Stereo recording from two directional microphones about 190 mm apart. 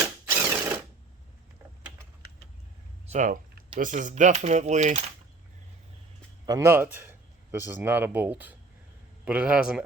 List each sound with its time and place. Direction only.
0.0 s mechanisms: 10° right (ahead or behind)
3.1 s speech: 40° right (ahead or behind)
6.4 s a man's voice: 20° right (ahead or behind)